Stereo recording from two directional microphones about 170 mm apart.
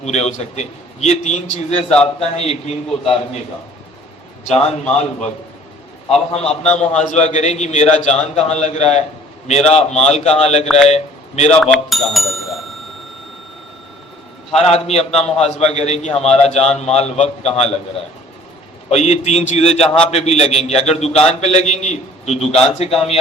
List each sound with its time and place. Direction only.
0.0 s a man's voice: 40° left (ahead or behind)
6.1 s a man's voice: 40° left (ahead or behind)
11.6 s speech: centre (ahead or behind)
14.5 s a man's voice: 40° left (ahead or behind)
18.9 s a man's voice: 40° left (ahead or behind)